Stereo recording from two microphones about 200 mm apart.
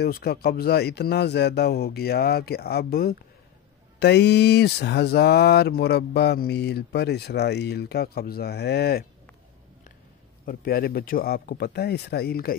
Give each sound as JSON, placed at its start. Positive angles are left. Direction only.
{"t": 0.0, "sound": "speech", "side_deg": 50}
{"t": 10.4, "sound": "speech", "side_deg": 45}